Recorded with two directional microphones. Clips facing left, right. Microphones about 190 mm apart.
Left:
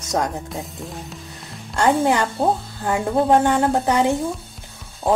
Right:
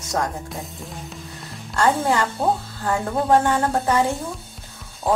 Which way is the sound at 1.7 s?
20° left (ahead or behind).